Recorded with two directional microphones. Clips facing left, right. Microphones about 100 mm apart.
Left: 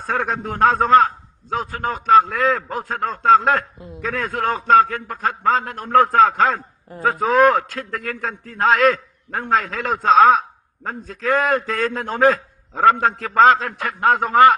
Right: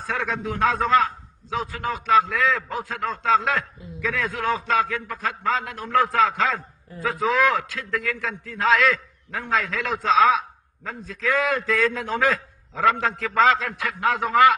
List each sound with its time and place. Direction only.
0.0 s a man's voice: 45° left (ahead or behind)